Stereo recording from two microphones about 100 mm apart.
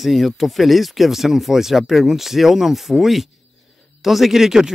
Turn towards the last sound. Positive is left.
turn(degrees=-5)  # may be behind; listen again after turning